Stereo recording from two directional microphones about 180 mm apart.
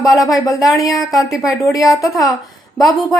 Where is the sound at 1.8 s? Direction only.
Centre (ahead or behind).